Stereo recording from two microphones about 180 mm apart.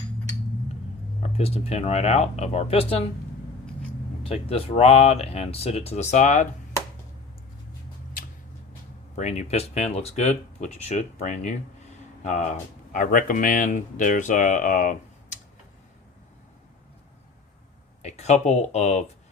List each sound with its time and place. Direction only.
1.3 s speech: 35° left (ahead or behind)
4.2 s speech: 30° left (ahead or behind)
9.1 s speech: 40° left (ahead or behind)
18.0 s speech: 40° left (ahead or behind)